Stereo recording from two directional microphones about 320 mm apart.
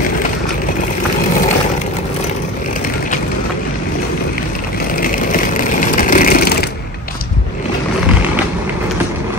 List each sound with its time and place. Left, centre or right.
4.9 s vehicle: left